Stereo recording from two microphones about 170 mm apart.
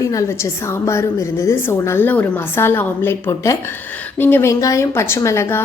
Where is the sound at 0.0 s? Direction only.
20° left (ahead or behind).